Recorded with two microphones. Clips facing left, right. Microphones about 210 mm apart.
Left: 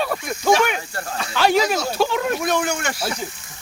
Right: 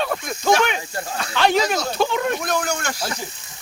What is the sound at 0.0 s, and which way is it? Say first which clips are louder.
Speech: left 1 dB; 5° left (ahead or behind).